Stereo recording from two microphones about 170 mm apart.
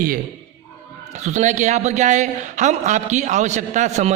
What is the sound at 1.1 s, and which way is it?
A man's voice, 45° right (ahead or behind).